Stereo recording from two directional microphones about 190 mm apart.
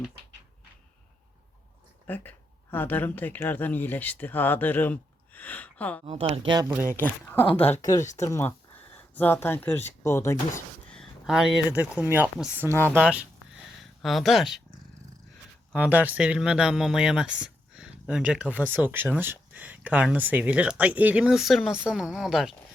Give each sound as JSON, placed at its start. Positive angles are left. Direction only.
{"t": 2.0, "sound": "speech", "side_deg": 10}
{"t": 6.1, "sound": "speech", "side_deg": -30}
{"t": 6.9, "sound": "speech", "side_deg": 10}
{"t": 10.9, "sound": "speech", "side_deg": 0}
{"t": 15.7, "sound": "speech", "side_deg": -10}